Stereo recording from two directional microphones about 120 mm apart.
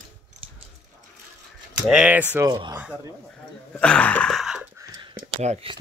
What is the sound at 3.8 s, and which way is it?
Speech, 10° left (ahead or behind).